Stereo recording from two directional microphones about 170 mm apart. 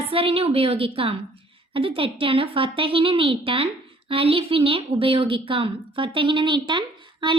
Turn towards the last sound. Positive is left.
turn(degrees=-30)  # may be behind; listen again after turning